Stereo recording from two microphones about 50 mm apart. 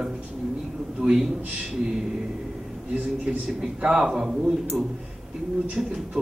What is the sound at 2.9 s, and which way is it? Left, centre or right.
A man's voice, right.